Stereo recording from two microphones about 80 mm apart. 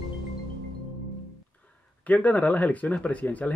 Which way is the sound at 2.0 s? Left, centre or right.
Centre.